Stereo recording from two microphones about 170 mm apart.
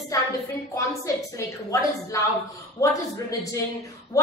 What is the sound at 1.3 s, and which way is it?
Speech, 20° left (ahead or behind).